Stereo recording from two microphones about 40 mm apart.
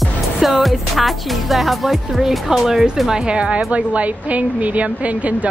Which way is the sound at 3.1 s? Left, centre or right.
Right.